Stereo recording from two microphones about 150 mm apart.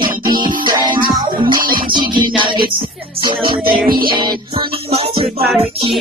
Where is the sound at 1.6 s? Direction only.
70° right (ahead or behind).